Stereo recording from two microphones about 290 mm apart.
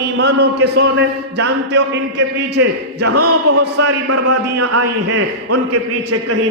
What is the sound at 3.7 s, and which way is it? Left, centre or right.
A man's voice, right.